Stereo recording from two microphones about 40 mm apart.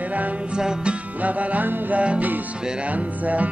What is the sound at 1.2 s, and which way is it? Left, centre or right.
Music, right.